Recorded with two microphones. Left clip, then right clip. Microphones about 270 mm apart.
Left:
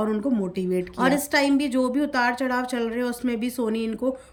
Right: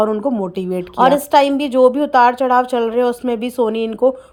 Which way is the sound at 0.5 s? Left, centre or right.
Centre.